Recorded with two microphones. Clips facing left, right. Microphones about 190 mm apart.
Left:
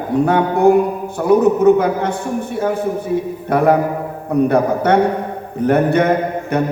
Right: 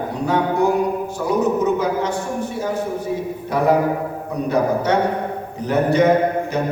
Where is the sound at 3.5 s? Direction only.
55° left (ahead or behind).